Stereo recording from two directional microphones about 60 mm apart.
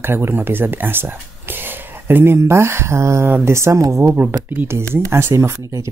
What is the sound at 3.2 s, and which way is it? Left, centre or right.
Speech, right.